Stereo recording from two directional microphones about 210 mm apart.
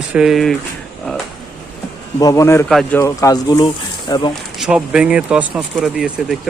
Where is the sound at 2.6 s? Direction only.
Centre (ahead or behind).